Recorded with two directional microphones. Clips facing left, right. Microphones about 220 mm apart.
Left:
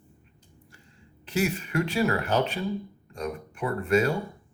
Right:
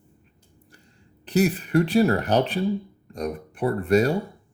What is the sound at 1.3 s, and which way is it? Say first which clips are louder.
Speech: right 6 dB; 35° right (ahead or behind).